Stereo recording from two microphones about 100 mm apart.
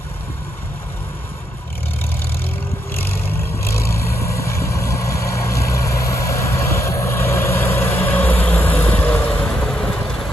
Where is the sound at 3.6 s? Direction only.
30° left (ahead or behind).